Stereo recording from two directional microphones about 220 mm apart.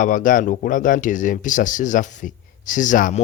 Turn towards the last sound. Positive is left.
turn(degrees=35)  # may be behind; listen again after turning